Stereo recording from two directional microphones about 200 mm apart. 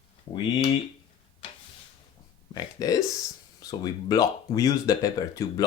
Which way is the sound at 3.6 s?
20° left (ahead or behind).